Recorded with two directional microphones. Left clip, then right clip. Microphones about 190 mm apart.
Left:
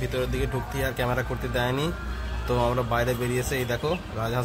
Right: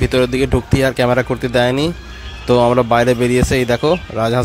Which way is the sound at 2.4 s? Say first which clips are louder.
Right 13 dB; 40° right (ahead or behind).